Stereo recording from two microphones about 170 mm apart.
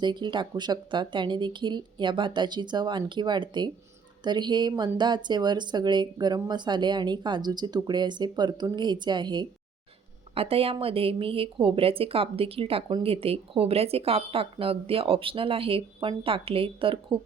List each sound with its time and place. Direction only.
0.0 s speech: 25° right (ahead or behind)